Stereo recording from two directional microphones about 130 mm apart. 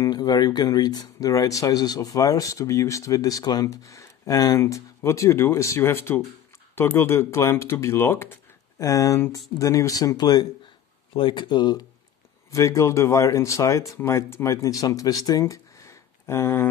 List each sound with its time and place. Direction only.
0.0 s speech: 30° left (ahead or behind)
12.4 s speech: 25° left (ahead or behind)